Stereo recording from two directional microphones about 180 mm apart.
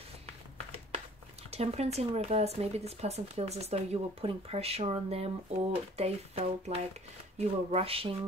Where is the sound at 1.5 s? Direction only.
35° right (ahead or behind).